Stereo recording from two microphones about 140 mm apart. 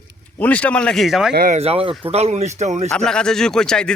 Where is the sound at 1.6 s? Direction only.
45° right (ahead or behind).